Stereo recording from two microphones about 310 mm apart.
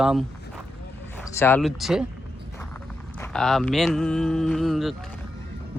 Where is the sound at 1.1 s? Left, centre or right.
Centre.